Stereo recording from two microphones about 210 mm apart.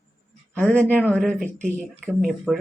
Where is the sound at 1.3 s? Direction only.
35° right (ahead or behind).